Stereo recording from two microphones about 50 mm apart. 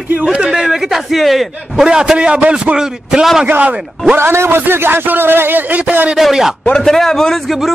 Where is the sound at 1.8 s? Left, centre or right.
Centre.